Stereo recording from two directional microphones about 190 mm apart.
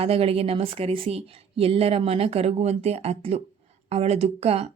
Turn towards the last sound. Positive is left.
turn(degrees=-30)  # may be behind; listen again after turning